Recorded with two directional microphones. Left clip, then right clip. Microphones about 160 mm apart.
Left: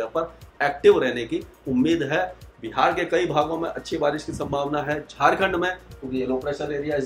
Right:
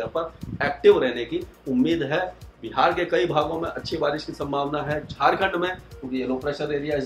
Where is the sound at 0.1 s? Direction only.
20° left (ahead or behind).